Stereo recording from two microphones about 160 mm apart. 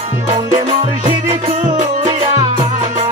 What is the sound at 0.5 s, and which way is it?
Music, 40° right (ahead or behind).